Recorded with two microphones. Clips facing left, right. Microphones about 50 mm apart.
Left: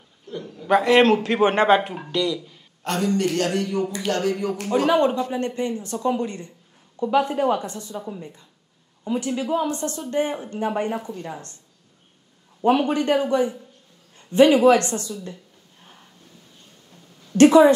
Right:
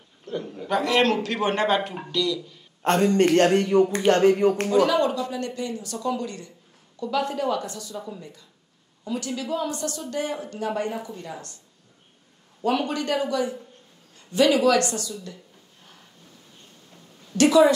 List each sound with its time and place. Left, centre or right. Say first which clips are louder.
0.3 s a sound: right 3 dB; right
0.7 s speech: left 6 dB; left
2.8 s a man's voice: right 3 dB; right
4.7 s speech: left 6 dB; left
12.6 s speech: left 5 dB; left
17.3 s a woman's voice: left 4 dB; left